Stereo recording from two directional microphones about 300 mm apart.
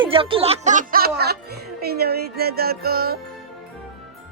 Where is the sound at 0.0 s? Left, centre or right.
Centre.